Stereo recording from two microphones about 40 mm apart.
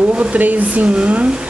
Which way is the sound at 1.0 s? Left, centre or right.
Right.